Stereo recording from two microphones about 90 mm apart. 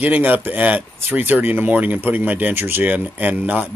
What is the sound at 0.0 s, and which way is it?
Speech, 20° right (ahead or behind).